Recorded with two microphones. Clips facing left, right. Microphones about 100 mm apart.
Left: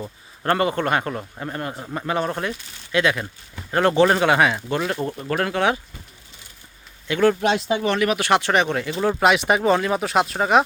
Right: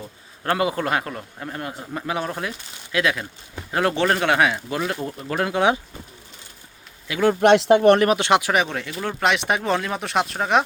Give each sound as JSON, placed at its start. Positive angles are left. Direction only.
{"t": 0.4, "sound": "a man's voice", "side_deg": -5}
{"t": 5.5, "sound": "speech", "side_deg": -15}
{"t": 7.1, "sound": "a man's voice", "side_deg": -5}
{"t": 7.4, "sound": "speech", "side_deg": -65}
{"t": 8.2, "sound": "a man's voice", "side_deg": -15}